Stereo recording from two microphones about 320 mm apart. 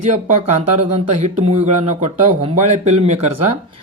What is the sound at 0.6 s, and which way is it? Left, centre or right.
Speech, right.